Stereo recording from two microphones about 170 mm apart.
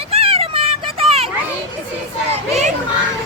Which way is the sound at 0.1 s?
35° right (ahead or behind).